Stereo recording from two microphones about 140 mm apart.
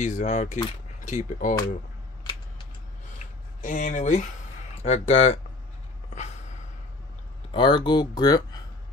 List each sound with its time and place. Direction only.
0.0 s speech: 60° left (ahead or behind)
3.6 s speech: 60° left (ahead or behind)
4.8 s speech: 50° left (ahead or behind)
7.5 s speech: 35° left (ahead or behind)